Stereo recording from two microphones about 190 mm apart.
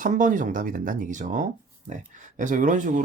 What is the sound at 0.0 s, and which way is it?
Speech, 40° right (ahead or behind).